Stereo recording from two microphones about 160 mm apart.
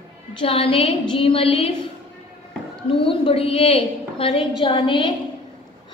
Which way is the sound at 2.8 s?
35° left (ahead or behind).